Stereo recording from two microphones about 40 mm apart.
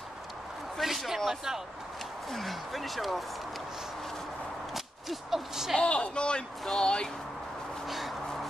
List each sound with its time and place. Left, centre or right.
0.7 s speech: centre
5.3 s speech: centre
5.8 s speech: left
6.6 s speech: centre